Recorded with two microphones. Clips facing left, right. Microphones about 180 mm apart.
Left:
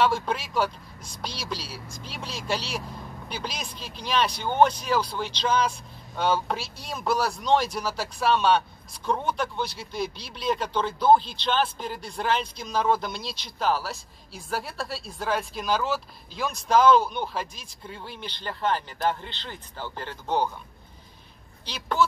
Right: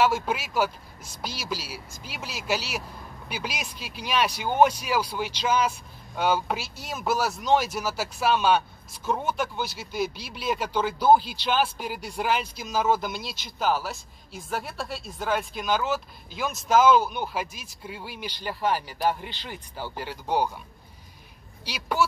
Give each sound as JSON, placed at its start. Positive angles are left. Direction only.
{"t": 0.0, "sound": "speech", "side_deg": -5}
{"t": 21.6, "sound": "speech", "side_deg": -10}